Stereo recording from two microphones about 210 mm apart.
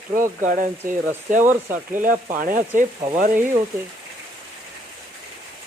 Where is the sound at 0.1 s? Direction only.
40° right (ahead or behind).